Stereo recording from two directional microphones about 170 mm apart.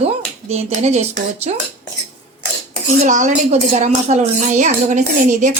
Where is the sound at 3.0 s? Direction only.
45° right (ahead or behind).